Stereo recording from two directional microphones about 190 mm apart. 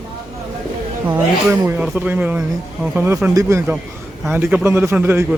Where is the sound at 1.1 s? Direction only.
10° right (ahead or behind).